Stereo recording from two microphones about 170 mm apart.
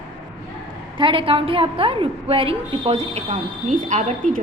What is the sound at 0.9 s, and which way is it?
A woman's voice, 30° right (ahead or behind).